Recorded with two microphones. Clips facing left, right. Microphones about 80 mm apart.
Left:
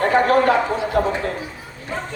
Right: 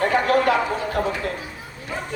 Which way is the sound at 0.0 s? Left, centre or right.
Left.